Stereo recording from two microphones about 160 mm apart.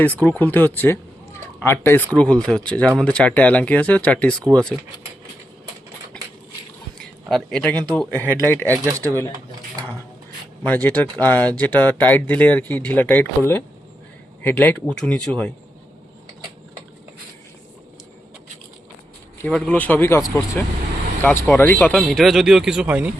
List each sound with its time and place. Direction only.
0.0 s speech: 10° left (ahead or behind)
7.3 s speech: centre (ahead or behind)
8.7 s speech: 20° right (ahead or behind)
10.7 s speech: 10° left (ahead or behind)
19.4 s speech: 5° left (ahead or behind)
21.4 s speech: 10° left (ahead or behind); by 23.1 s 10° right (ahead or behind)